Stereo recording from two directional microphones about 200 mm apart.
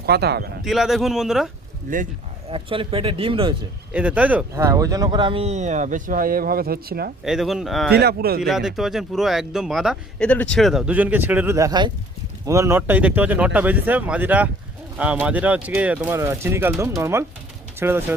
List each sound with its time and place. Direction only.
0.0 s speech: 55° right (ahead or behind)
0.6 s speech: centre (ahead or behind)
1.9 s speech: 45° right (ahead or behind)
2.5 s speech: 25° right (ahead or behind)
3.9 s speech: 5° right (ahead or behind); by 7.1 s 50° right (ahead or behind)
7.3 s speech: centre (ahead or behind)
7.9 s speech: 50° right (ahead or behind)
8.4 s speech: centre (ahead or behind)